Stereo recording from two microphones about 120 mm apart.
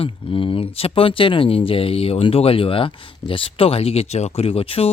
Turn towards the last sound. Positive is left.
turn(degrees=50)  # may be behind; listen again after turning